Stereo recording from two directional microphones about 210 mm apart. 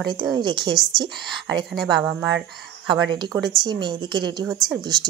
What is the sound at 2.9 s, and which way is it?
Speech, 20° right (ahead or behind).